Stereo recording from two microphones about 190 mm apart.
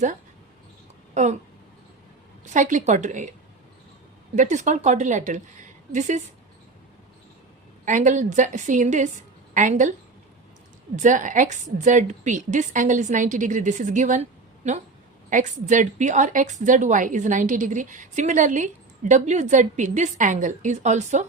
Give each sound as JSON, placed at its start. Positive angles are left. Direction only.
{"t": 1.1, "sound": "speech", "side_deg": -40}
{"t": 2.4, "sound": "a woman's voice", "side_deg": -40}
{"t": 4.4, "sound": "a woman's voice", "side_deg": -40}
{"t": 7.9, "sound": "a woman's voice", "side_deg": -40}
{"t": 10.9, "sound": "a woman's voice", "side_deg": -40}